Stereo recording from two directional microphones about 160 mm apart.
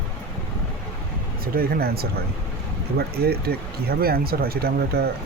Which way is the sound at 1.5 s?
70° right (ahead or behind).